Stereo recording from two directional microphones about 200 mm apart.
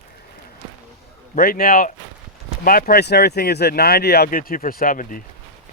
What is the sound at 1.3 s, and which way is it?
Speech, 45° left (ahead or behind).